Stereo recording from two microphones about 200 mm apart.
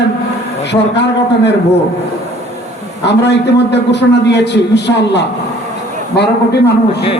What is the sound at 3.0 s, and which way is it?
A man's voice, 60° left (ahead or behind).